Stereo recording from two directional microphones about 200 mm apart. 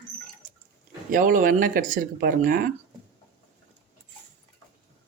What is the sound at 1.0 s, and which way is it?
Speech, 40° right (ahead or behind).